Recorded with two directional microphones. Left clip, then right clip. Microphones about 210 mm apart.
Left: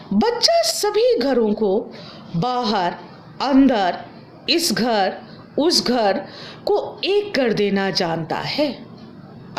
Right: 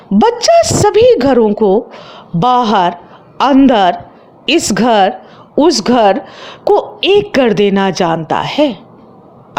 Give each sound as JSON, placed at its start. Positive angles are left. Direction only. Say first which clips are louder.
{"t": 0.2, "sound": "a woman's voice", "louder": "right 9 dB", "side_deg": -35}